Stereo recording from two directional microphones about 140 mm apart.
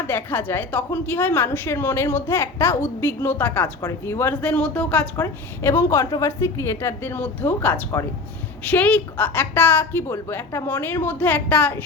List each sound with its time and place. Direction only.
0.1 s a woman's voice: 15° left (ahead or behind)
5.1 s a woman's voice: 20° left (ahead or behind)